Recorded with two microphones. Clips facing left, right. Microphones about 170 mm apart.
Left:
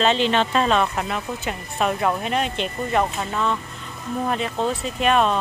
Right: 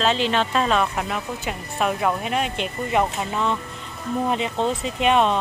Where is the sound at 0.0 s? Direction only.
5° right (ahead or behind).